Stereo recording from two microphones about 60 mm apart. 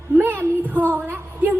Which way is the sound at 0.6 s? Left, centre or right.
Right.